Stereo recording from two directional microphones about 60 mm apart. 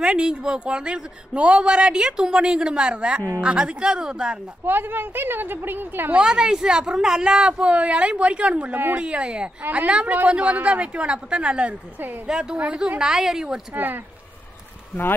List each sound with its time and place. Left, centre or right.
0.0 s a man's voice: centre
4.6 s a woman's voice: right
6.1 s a man's voice: centre
13.7 s a woman's voice: right